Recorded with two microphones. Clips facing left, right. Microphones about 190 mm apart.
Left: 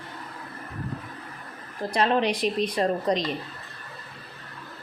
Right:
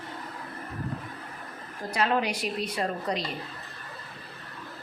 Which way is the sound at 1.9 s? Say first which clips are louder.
Left 4 dB; 30° left (ahead or behind).